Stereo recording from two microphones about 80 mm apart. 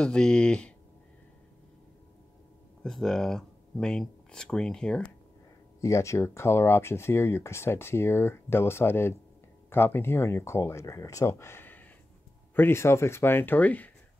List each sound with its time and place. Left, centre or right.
0.0 s speech: centre
2.8 s speech: centre
5.8 s speech: left; by 13.9 s centre